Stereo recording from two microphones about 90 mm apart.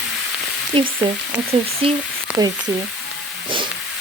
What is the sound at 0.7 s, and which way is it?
Speech, 80° right.